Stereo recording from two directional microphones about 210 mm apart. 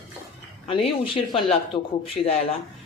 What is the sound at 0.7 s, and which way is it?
A woman's voice, 25° left (ahead or behind).